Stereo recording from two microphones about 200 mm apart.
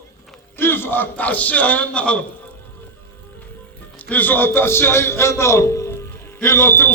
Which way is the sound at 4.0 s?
10° left (ahead or behind).